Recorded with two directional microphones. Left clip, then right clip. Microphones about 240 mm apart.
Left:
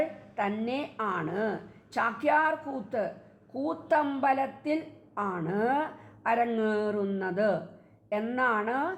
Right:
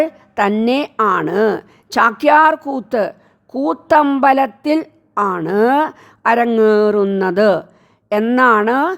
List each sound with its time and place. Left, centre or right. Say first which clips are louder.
0.0 s a woman's voice: right 14 dB; right